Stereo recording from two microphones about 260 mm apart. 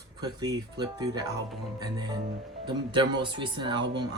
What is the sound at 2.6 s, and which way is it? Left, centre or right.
Speech, centre.